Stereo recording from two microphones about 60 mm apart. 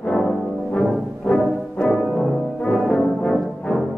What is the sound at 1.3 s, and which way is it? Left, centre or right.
Music, centre.